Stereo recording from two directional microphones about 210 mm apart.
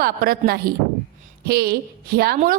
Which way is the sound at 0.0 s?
45° right (ahead or behind).